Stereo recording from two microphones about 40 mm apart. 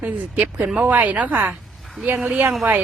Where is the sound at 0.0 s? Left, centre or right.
Right.